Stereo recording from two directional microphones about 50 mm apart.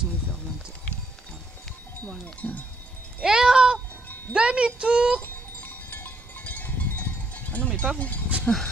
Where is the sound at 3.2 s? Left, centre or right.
Centre.